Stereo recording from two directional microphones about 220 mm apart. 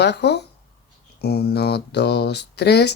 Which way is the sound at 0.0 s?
50° left (ahead or behind).